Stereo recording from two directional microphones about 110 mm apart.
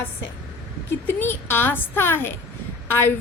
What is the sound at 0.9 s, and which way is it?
A woman's voice, 20° left (ahead or behind).